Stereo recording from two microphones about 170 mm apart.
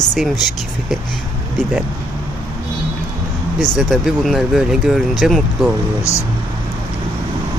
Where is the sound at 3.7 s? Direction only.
Centre (ahead or behind).